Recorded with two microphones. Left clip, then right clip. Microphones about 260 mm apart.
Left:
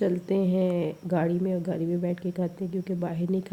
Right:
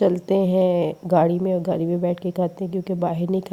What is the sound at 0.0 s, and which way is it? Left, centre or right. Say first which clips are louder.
A woman's voice: right 7 dB; right.